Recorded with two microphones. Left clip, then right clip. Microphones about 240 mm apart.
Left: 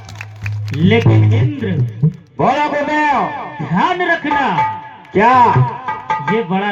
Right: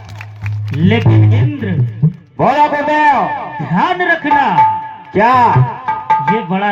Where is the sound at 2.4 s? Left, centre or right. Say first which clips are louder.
Right 3 dB; right.